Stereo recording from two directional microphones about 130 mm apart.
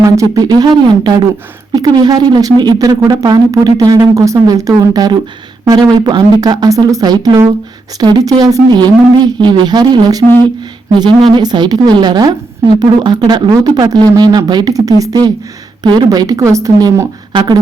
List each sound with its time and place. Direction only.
0.0 s speech: 25° right (ahead or behind)